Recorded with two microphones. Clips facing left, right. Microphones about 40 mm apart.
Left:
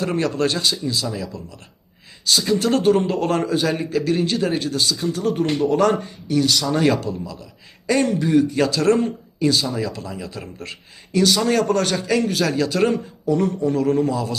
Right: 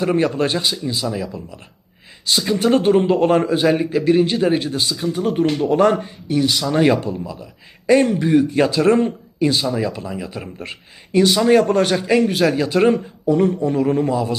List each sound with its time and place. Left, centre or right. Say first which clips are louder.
0.0 s a man's voice: right 3 dB; centre